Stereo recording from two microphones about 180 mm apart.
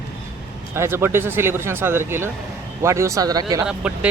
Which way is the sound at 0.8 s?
15° right (ahead or behind).